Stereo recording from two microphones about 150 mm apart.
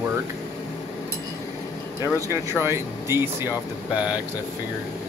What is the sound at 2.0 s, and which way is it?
Speech, 20° right (ahead or behind).